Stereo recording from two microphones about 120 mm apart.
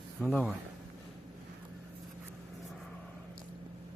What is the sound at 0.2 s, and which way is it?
Speech, 10° left (ahead or behind).